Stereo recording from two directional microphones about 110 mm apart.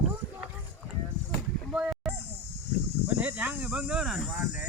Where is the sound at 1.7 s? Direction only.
10° right (ahead or behind).